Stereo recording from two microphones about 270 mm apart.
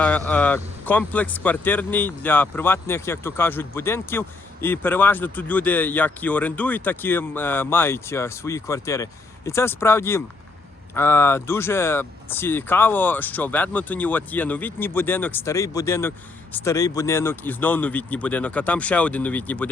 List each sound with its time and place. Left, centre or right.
0.3 s speech: centre